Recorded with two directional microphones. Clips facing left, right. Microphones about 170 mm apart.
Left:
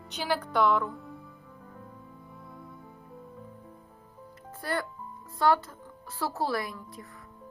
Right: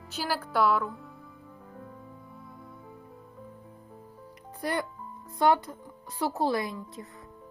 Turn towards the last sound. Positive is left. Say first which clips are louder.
# right 2 dB
turn(degrees=-20)  # may be behind; listen again after turning